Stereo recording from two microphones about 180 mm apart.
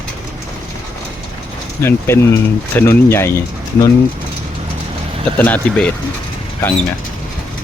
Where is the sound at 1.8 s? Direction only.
15° left (ahead or behind).